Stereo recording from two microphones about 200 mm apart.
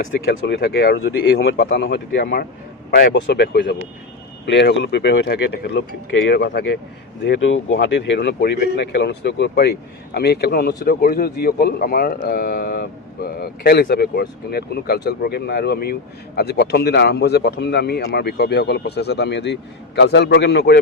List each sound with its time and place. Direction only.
0.3 s speech: 60° left (ahead or behind)
7.3 s a man's voice: 70° left (ahead or behind)